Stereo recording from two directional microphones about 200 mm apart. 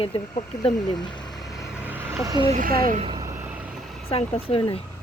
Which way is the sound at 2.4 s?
40° right (ahead or behind).